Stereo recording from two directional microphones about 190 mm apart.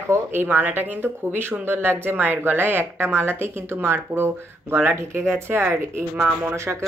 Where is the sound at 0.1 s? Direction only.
10° right (ahead or behind).